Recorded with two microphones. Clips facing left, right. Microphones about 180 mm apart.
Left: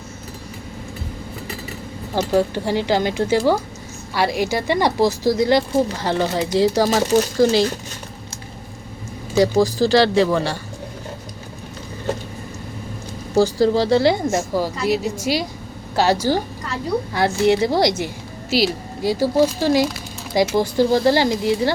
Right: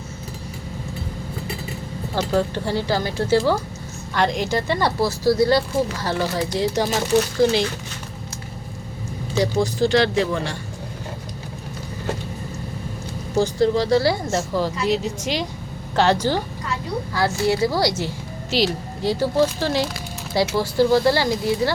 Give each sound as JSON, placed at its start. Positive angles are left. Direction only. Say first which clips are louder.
{"t": 2.1, "sound": "speech", "louder": "left 3 dB", "side_deg": 15}
{"t": 6.9, "sound": "speech", "louder": "left 3 dB", "side_deg": 40}
{"t": 9.3, "sound": "speech", "louder": "left 5 dB", "side_deg": 40}
{"t": 13.3, "sound": "speech", "louder": "left 3 dB", "side_deg": 35}
{"t": 17.2, "sound": "a woman's voice", "louder": "left 3 dB", "side_deg": 20}